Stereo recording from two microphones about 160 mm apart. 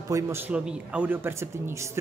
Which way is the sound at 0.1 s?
15° right (ahead or behind).